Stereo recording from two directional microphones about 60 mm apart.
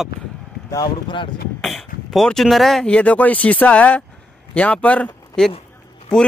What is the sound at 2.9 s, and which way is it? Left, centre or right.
Speech, left.